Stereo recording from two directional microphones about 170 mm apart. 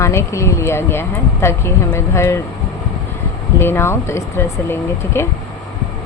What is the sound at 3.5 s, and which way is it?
Speech, 15° left (ahead or behind).